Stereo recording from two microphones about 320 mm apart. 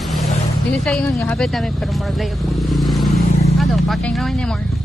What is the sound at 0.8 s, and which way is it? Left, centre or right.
Speech, centre.